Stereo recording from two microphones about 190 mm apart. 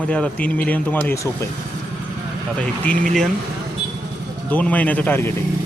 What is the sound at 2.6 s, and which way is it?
Speech, 5° left (ahead or behind).